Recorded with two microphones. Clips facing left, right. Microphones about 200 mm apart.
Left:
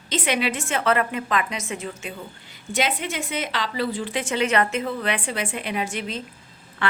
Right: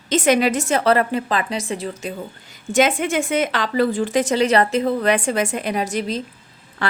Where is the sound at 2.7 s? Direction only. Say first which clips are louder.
Right 8 dB; 45° right (ahead or behind).